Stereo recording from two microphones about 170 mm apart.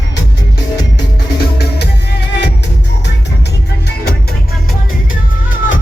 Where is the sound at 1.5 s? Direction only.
70° left (ahead or behind).